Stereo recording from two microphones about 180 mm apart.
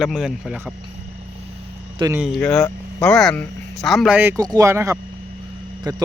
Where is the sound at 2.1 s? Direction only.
Centre (ahead or behind).